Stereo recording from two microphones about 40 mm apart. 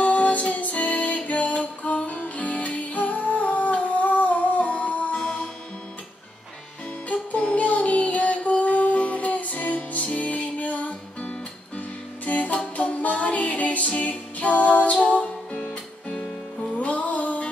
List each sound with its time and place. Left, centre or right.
0.0 s music: left
7.1 s music: left
10.9 s music: left
12.3 s music: left